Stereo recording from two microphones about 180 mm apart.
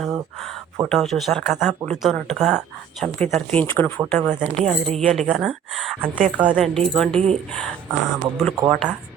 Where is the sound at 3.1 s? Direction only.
40° right (ahead or behind).